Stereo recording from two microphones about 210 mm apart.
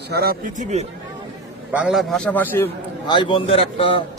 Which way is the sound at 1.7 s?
5° right (ahead or behind).